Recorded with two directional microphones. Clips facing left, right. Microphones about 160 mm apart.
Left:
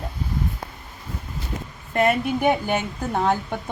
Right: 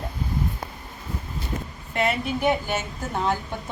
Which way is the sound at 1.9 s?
50° left (ahead or behind).